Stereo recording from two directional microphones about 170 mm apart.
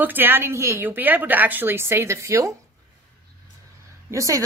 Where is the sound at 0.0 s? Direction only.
10° right (ahead or behind).